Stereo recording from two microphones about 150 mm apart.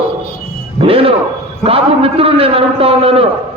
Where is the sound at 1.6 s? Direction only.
40° right (ahead or behind).